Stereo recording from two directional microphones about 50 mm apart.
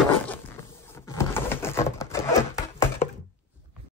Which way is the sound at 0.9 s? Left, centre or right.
Left.